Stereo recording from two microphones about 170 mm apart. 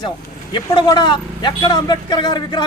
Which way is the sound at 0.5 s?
25° left (ahead or behind).